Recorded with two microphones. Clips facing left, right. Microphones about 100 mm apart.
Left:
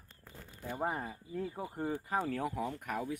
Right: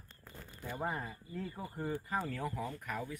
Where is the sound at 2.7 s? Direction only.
55° left (ahead or behind).